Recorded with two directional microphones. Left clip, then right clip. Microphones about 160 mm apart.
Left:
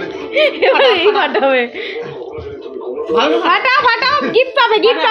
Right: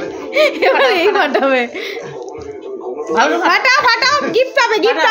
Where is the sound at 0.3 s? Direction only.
30° right (ahead or behind).